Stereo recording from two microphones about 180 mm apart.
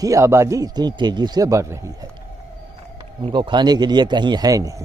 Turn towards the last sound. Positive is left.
turn(degrees=-20)  # may be behind; listen again after turning